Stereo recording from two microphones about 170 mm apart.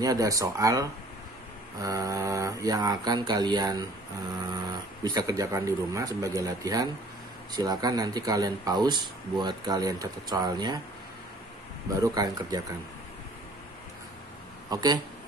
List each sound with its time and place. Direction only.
0.0 s speech: 20° right (ahead or behind)
5.0 s speech: 20° right (ahead or behind)
12.0 s speech: 20° right (ahead or behind)
14.7 s speech: 20° right (ahead or behind)